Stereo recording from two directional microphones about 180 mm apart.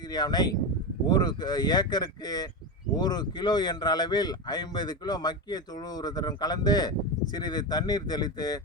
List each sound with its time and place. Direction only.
0.1 s speech: 20° left (ahead or behind)